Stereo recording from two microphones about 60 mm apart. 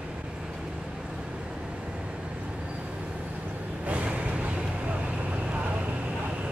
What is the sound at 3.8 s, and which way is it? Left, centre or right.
Vehicle, right.